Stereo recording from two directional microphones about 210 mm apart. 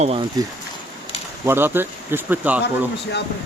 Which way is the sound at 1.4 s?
10° right (ahead or behind).